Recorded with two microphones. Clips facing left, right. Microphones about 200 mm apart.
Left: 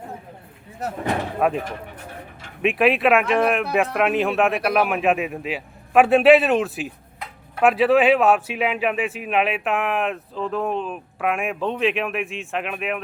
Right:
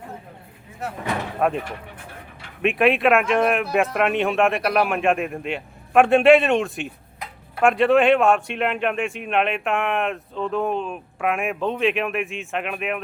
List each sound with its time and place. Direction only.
0.8 s speech: 40° left (ahead or behind)
1.4 s speech: centre (ahead or behind)